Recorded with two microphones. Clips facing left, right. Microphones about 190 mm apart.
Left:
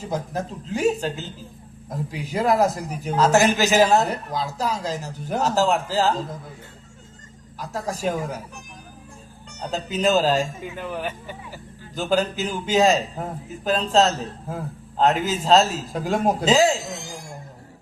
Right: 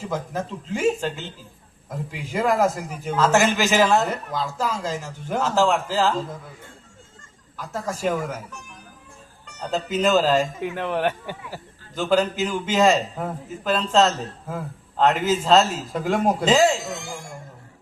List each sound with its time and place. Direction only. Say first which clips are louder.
0.1 s a man's voice: left 1 dB; 40° left (ahead or behind)
7.5 s a man's voice: even; 40° left (ahead or behind)
9.5 s a man's voice: right 3 dB; 40° left (ahead or behind)
10.6 s a man's voice: right 6 dB; 70° right (ahead or behind)
11.9 s a man's voice: right 2 dB; 40° left (ahead or behind)